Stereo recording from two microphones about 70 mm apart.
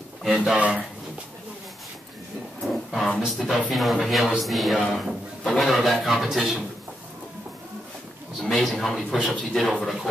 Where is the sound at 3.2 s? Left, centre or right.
Centre.